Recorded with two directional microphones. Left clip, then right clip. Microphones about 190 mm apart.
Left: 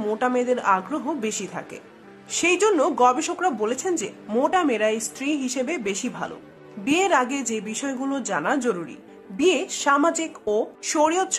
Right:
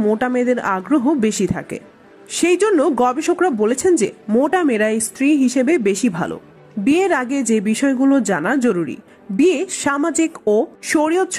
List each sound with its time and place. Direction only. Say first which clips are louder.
0.1 s speech: right 5 dB; 30° right (ahead or behind)